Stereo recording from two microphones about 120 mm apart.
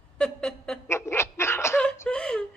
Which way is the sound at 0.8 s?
20° left (ahead or behind).